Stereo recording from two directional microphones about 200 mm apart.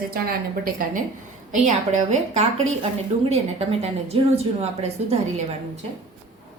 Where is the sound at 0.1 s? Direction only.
45° right (ahead or behind); by 5.1 s 30° right (ahead or behind).